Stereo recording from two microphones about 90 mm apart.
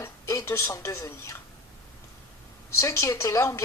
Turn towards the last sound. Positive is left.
turn(degrees=35)  # may be behind; listen again after turning